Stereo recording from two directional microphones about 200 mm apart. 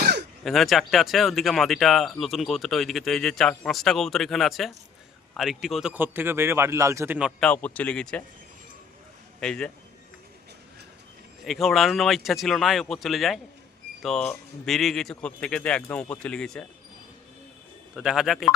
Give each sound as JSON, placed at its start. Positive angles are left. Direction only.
{"t": 0.0, "sound": "a sound", "side_deg": -55}
{"t": 0.4, "sound": "speech", "side_deg": 0}
{"t": 9.4, "sound": "speech", "side_deg": 5}
{"t": 11.4, "sound": "speech", "side_deg": 0}
{"t": 17.9, "sound": "speech", "side_deg": 0}